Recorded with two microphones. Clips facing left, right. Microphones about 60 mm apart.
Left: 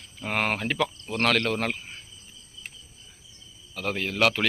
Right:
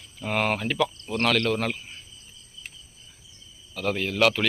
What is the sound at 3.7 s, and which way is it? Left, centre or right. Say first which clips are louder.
Speech: right 2 dB; left.